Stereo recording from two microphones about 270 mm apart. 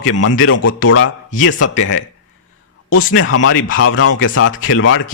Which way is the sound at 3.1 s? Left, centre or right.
Left.